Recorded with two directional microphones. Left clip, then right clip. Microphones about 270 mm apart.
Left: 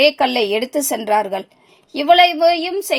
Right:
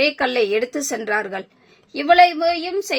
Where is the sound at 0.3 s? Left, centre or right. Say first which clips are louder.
Left 2 dB; centre.